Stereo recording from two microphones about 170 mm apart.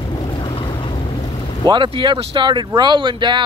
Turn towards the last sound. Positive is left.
turn(degrees=-25)  # may be behind; listen again after turning